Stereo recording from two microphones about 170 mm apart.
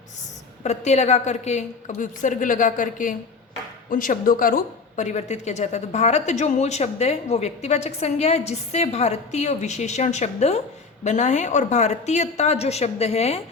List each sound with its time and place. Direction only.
0.6 s a woman's voice: 40° left (ahead or behind)